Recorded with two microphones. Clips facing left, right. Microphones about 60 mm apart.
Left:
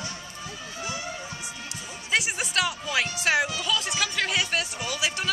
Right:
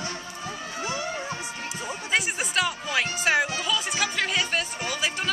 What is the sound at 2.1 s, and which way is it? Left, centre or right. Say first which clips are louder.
Speech: even; centre.